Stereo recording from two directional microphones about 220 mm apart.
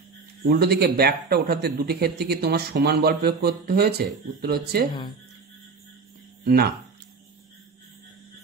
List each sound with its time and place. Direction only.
0.5 s speech: 45° right (ahead or behind)
6.4 s speech: 45° right (ahead or behind)